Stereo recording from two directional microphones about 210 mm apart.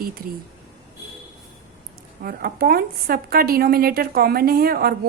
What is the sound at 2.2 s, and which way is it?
A woman's voice, 45° right (ahead or behind).